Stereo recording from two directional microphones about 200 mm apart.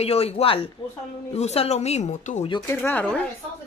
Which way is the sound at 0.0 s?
30° left (ahead or behind).